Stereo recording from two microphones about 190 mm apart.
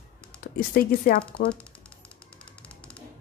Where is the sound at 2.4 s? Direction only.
5° left (ahead or behind).